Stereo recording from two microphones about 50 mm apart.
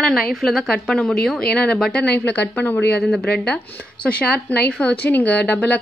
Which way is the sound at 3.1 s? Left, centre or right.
Left.